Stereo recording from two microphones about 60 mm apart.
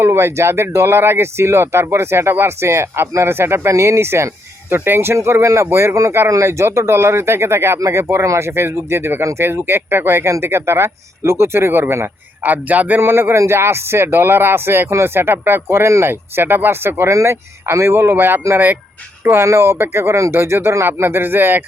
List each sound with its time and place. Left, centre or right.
0.0 s speech: right
6.2 s speech: right
7.8 s speech: right
12.4 s speech: right
13.0 s speech: right
17.1 s speech: right